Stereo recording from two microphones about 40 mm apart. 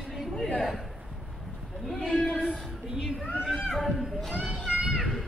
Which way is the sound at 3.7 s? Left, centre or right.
Centre.